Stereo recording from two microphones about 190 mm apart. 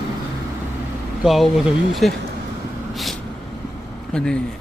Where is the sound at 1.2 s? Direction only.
Centre (ahead or behind).